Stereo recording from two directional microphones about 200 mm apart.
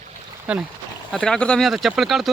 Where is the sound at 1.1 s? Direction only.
5° left (ahead or behind).